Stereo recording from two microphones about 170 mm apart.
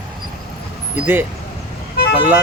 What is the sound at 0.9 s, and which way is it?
Speech, 10° right (ahead or behind).